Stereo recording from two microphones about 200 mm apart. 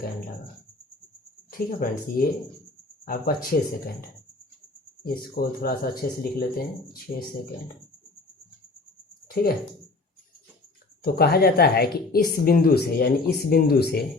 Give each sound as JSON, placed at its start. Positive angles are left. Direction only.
{"t": 1.5, "sound": "speech", "side_deg": 45}
{"t": 9.2, "sound": "a sound", "side_deg": 45}
{"t": 11.0, "sound": "speech", "side_deg": 50}